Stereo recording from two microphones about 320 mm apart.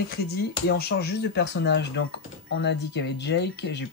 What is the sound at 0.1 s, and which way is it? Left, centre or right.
Speech, left.